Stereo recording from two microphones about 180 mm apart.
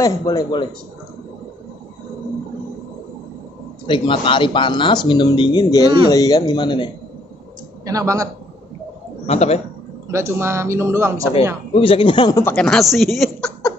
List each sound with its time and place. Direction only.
0.0 s speech: 20° left (ahead or behind)
3.8 s speech: 30° left (ahead or behind)
7.8 s speech: 20° right (ahead or behind)
9.2 s a man's voice: 35° left (ahead or behind)
10.1 s speech: 15° right (ahead or behind)
11.7 s speech: 30° left (ahead or behind)
12.5 s speech: centre (ahead or behind)